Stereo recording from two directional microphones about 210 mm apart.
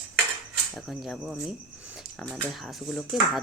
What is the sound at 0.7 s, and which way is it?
Speech, centre (ahead or behind).